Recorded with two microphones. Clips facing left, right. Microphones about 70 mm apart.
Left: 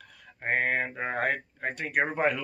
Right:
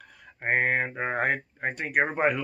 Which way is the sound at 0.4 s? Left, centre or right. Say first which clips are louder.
Right 2 dB; right.